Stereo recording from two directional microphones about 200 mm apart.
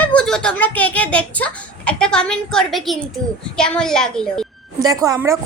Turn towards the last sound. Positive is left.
turn(degrees=-15)  # may be behind; listen again after turning